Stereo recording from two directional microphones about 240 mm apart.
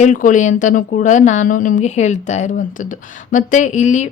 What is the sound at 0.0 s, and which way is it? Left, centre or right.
A woman's voice, left.